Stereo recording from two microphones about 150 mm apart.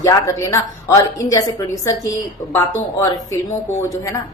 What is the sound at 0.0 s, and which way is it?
A woman's voice, 20° left (ahead or behind).